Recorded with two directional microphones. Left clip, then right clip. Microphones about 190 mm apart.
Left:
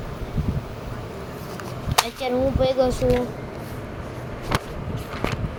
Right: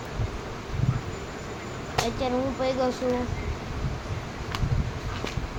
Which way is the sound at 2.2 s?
15° left (ahead or behind).